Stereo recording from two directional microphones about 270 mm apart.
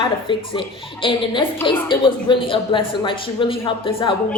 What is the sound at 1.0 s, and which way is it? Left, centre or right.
Speech, centre.